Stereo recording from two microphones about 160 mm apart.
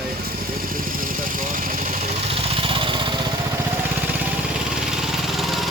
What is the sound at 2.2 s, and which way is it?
Vehicle, 35° right (ahead or behind).